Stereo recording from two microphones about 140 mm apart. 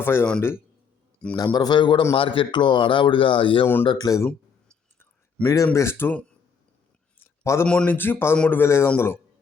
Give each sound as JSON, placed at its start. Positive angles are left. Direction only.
{"t": 0.0, "sound": "speech", "side_deg": 15}
{"t": 1.5, "sound": "speech", "side_deg": 30}
{"t": 3.8, "sound": "speech", "side_deg": 30}
{"t": 4.9, "sound": "a sound", "side_deg": 20}
{"t": 5.7, "sound": "speech", "side_deg": 15}
{"t": 7.2, "sound": "a sound", "side_deg": 20}
{"t": 7.7, "sound": "speech", "side_deg": 10}